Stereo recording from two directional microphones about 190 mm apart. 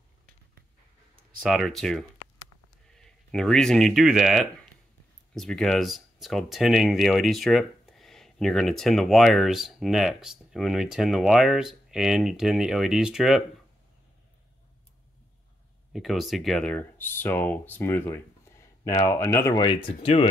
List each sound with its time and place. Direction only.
1.4 s speech: centre (ahead or behind)
15.9 s speech: centre (ahead or behind); by 20.2 s 30° left (ahead or behind)